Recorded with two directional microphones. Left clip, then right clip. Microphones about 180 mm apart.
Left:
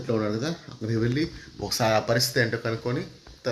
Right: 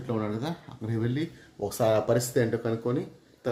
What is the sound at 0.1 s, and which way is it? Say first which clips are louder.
Speech: left 4 dB; 10° right (ahead or behind).